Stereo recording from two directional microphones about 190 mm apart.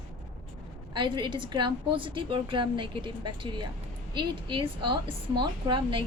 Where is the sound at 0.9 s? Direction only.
25° right (ahead or behind).